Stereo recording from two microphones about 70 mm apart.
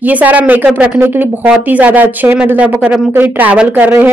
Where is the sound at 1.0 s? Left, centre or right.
Right.